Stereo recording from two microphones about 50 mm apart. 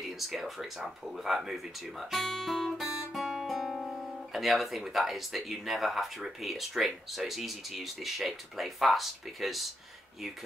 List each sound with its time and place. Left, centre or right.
0.0 s speech: centre
2.8 s speech: centre